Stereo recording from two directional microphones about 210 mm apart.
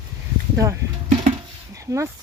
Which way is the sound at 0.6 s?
15° right (ahead or behind).